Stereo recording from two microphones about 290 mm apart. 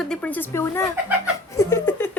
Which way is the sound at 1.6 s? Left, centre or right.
Centre.